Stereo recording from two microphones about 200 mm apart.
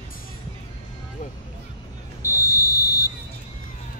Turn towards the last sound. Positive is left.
turn(degrees=15)  # may be behind; listen again after turning